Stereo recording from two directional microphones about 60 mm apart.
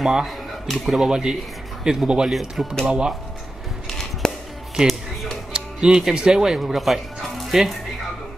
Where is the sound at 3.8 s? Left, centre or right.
Centre.